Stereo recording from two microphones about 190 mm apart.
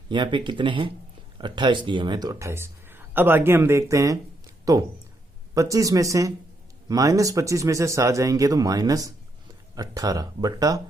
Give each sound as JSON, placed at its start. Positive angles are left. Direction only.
{"t": 0.1, "sound": "speech", "side_deg": -25}